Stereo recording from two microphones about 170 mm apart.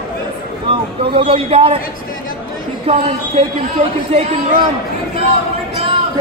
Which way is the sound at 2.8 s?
35° right (ahead or behind).